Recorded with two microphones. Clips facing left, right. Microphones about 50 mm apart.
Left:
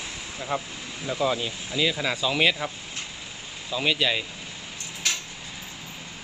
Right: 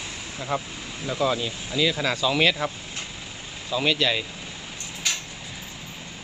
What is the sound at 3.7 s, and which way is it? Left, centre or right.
Speech, centre.